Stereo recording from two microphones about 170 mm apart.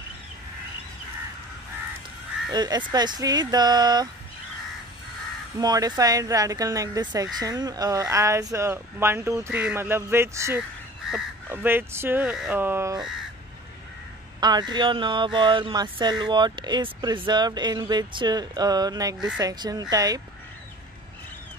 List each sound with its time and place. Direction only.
2.5 s speech: 25° right (ahead or behind)
5.6 s speech: 20° right (ahead or behind)
11.0 s honk: 5° right (ahead or behind)
11.4 s speech: 10° right (ahead or behind)
14.4 s speech: 25° right (ahead or behind)